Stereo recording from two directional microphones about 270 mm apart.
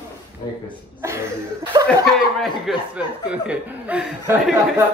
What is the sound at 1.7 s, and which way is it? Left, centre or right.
Speech, centre.